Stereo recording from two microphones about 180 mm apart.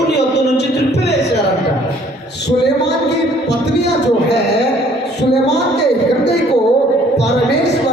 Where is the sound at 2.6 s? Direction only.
70° left (ahead or behind).